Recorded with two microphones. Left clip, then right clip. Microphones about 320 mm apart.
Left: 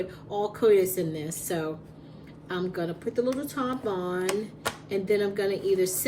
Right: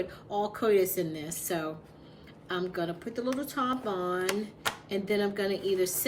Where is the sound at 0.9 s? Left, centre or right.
Centre.